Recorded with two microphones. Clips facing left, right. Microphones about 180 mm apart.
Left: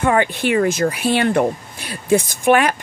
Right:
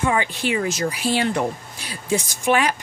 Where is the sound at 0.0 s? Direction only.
60° left (ahead or behind).